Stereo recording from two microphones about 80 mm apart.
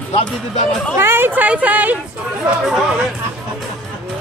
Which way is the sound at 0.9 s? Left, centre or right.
Right.